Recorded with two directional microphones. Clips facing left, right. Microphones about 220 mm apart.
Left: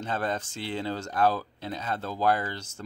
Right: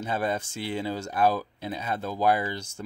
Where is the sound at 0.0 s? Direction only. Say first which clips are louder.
Right 2 dB; 10° right (ahead or behind).